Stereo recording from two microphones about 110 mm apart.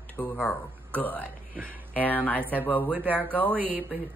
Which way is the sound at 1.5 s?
15° right (ahead or behind).